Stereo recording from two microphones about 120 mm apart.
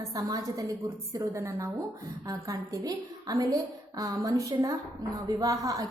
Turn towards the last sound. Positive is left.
turn(degrees=-30)  # may be behind; listen again after turning